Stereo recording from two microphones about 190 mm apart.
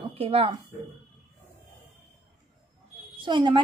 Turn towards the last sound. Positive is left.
turn(degrees=-25)  # may be behind; listen again after turning